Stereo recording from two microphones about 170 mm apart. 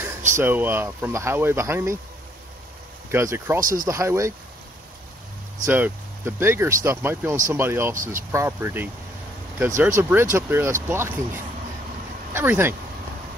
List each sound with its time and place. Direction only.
0.4 s speech: 10° right (ahead or behind)
3.1 s speech: 15° right (ahead or behind)
5.7 s speech: 10° right (ahead or behind)
7.9 s speech: 50° right (ahead or behind)
8.3 s speech: 15° right (ahead or behind)